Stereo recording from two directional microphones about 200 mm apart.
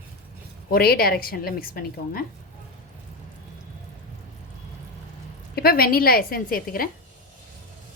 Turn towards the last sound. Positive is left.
turn(degrees=45)  # may be behind; listen again after turning